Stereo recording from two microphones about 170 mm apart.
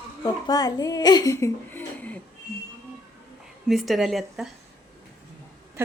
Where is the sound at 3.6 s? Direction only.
Centre (ahead or behind).